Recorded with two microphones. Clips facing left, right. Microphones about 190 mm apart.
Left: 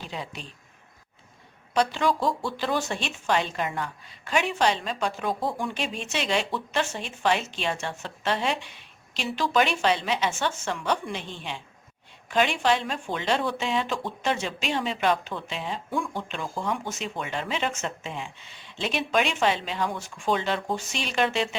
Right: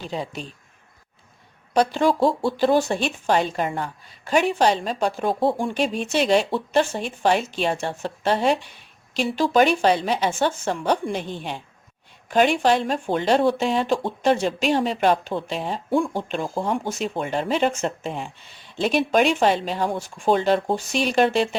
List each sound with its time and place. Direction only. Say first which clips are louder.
0.1 s speech: right 8 dB; 35° right (ahead or behind)
1.7 s a woman's voice: right 5 dB; 40° right (ahead or behind)